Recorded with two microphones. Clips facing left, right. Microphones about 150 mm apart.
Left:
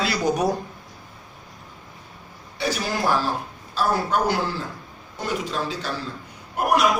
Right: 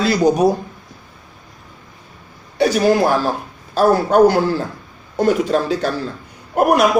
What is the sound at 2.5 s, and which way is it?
A man's voice, 55° right (ahead or behind).